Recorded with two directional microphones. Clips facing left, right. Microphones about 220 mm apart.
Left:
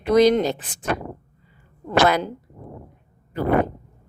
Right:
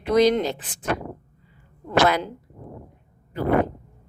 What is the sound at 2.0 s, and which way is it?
Speech, 45° left (ahead or behind).